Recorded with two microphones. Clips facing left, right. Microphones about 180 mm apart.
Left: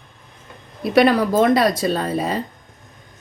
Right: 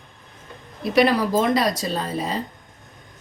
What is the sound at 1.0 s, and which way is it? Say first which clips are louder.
A woman's voice: left 4 dB; 60° left (ahead or behind).